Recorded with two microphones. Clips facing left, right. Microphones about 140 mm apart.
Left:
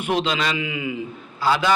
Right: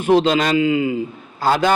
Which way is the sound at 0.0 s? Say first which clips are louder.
Right 8 dB; 40° right (ahead or behind).